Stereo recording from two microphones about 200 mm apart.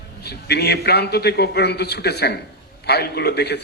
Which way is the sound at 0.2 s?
55° left (ahead or behind).